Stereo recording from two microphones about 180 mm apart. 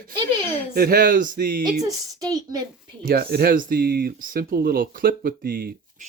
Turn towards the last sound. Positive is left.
turn(degrees=-50)  # may be behind; listen again after turning